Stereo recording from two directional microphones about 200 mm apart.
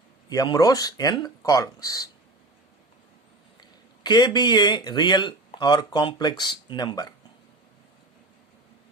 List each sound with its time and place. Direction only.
0.3 s speech: 20° left (ahead or behind)
3.6 s speech: 20° left (ahead or behind)